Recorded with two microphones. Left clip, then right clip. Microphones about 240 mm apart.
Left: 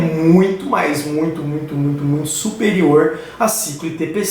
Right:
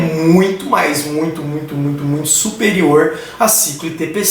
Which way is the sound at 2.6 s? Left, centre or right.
Centre.